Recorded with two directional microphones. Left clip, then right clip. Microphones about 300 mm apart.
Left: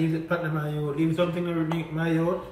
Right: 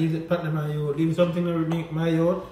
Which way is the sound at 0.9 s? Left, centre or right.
Centre.